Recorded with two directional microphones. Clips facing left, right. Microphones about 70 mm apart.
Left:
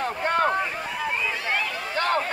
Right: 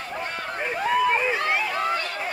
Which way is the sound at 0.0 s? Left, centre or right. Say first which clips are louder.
Left 8 dB; left.